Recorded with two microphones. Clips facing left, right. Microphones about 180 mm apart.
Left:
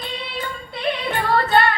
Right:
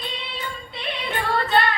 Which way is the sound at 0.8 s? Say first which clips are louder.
Left 5 dB; 45° left (ahead or behind).